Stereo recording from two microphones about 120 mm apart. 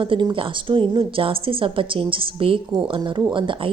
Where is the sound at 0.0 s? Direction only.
40° right (ahead or behind).